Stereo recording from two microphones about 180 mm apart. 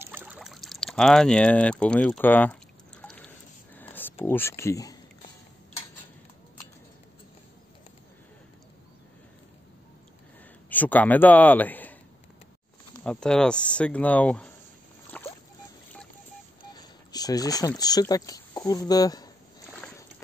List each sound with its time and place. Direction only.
0.0 s boat: 10° right (ahead or behind); by 3.3 s 5° left (ahead or behind)
3.7 s a sound: 10° left (ahead or behind)
10.7 s a man's voice: 10° left (ahead or behind)
13.0 s speech: 5° left (ahead or behind)
15.1 s boat: 10° left (ahead or behind)
16.6 s speech: 20° left (ahead or behind)